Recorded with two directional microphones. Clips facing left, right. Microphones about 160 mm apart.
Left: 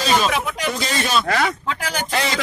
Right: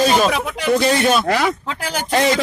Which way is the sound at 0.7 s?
60° right (ahead or behind).